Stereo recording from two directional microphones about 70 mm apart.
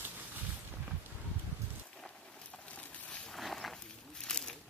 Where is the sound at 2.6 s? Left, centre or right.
Centre.